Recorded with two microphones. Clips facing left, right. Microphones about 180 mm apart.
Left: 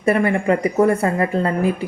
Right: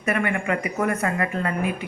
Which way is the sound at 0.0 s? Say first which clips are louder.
Left 7 dB; 35° left (ahead or behind).